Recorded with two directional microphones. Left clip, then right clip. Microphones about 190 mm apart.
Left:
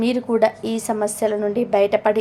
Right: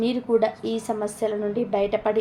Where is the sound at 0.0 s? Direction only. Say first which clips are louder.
Left 4 dB; 30° left (ahead or behind).